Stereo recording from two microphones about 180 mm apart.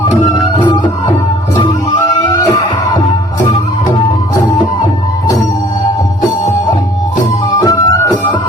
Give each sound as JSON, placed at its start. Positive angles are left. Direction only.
{"t": 0.0, "sound": "music", "side_deg": 15}
{"t": 2.3, "sound": "music", "side_deg": 20}
{"t": 7.6, "sound": "music", "side_deg": 20}